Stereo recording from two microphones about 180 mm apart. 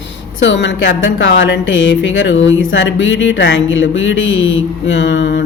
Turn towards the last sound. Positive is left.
turn(degrees=90)